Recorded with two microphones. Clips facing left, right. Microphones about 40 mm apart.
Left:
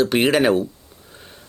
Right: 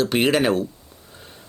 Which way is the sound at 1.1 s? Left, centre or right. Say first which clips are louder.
Left 1 dB; centre.